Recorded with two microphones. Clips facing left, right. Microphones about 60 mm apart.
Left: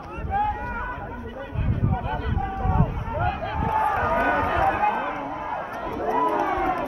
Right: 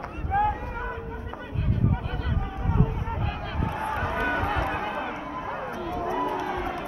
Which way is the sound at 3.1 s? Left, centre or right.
Centre.